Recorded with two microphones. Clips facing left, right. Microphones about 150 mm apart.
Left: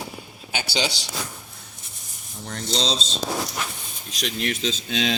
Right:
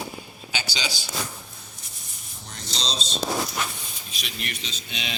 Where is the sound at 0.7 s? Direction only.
65° left (ahead or behind).